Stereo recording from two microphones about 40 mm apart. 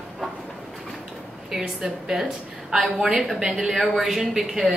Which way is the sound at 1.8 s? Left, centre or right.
Centre.